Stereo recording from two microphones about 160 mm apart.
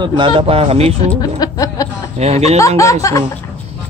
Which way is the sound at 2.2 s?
40° right (ahead or behind).